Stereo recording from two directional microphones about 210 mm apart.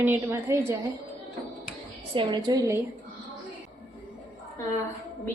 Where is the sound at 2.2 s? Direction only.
20° right (ahead or behind).